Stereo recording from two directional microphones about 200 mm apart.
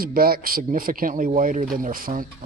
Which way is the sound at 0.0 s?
45° right (ahead or behind).